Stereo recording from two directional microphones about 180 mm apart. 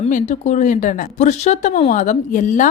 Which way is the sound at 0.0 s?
40° left (ahead or behind).